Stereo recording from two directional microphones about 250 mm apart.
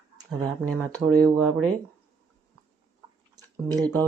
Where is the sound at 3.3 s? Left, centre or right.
Centre.